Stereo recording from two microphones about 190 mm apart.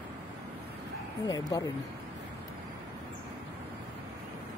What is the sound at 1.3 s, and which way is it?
Speech, 20° left (ahead or behind).